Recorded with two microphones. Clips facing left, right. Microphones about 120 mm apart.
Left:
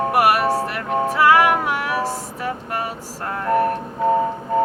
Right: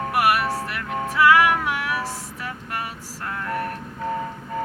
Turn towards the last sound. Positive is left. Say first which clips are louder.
# left 9 dB
turn(degrees=30)  # may be behind; listen again after turning